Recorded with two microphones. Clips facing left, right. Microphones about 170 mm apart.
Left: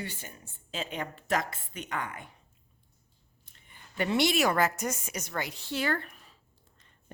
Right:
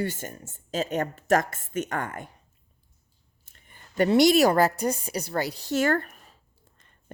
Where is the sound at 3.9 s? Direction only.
40° right (ahead or behind).